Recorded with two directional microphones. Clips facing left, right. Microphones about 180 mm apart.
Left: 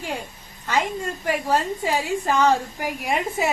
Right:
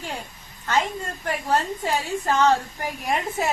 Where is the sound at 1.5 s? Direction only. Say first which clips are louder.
Right 1 dB; 10° left (ahead or behind).